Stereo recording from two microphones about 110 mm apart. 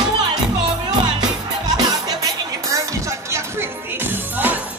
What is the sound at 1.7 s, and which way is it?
Music, 35° right (ahead or behind).